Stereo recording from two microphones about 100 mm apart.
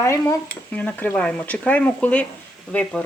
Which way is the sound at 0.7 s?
15° left (ahead or behind).